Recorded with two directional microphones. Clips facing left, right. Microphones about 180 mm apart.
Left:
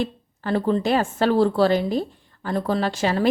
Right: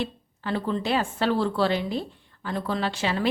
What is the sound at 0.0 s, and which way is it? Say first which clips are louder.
A woman's voice: left 4 dB; 45° left (ahead or behind).